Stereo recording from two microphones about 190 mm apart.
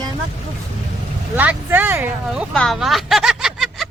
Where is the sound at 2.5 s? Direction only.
Centre (ahead or behind).